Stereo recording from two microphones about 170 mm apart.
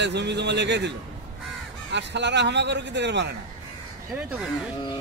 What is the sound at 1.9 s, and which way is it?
Speech, 90° right.